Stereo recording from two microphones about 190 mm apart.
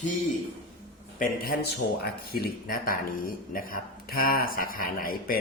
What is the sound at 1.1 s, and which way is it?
A man's voice, 50° left (ahead or behind).